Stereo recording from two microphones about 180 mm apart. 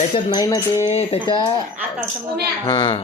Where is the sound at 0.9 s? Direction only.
35° left (ahead or behind).